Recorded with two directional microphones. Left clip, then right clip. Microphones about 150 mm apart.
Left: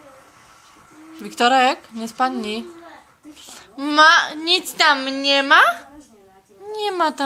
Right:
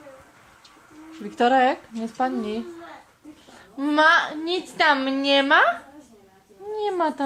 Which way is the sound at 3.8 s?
10° right (ahead or behind).